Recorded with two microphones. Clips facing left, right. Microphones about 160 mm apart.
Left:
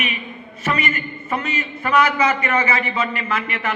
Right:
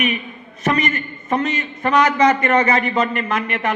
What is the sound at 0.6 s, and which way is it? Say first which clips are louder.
A man's voice: right 3 dB; 40° right (ahead or behind).